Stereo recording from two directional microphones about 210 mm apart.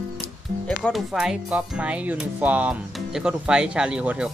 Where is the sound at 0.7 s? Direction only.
Centre (ahead or behind).